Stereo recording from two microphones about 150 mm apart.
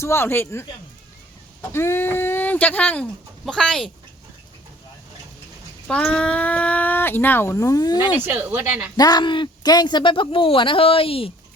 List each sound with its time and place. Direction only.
0.0 s speech: 15° left (ahead or behind)
1.7 s speech: 15° left (ahead or behind)
5.9 s speech: 5° left (ahead or behind); by 8.1 s 25° left (ahead or behind)
8.2 s speech: 10° right (ahead or behind)
9.0 s speech: 25° left (ahead or behind)